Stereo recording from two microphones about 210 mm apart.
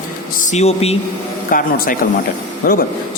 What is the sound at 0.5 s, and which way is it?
Speech, 30° left (ahead or behind).